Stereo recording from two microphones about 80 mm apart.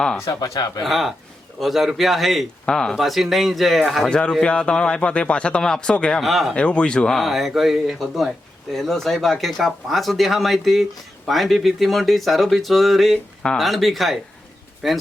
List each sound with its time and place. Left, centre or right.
0.2 s speech: left
0.8 s speech: centre
4.1 s speech: centre
6.2 s speech: centre
6.5 s speech: centre